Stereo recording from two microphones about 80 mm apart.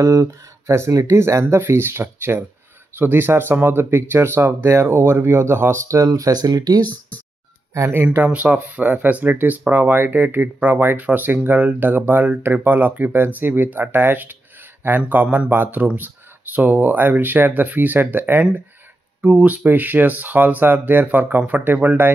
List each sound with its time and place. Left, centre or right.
0.0 s speech: right
7.7 s speech: right